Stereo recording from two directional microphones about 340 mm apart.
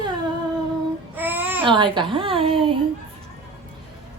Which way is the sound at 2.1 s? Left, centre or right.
Centre.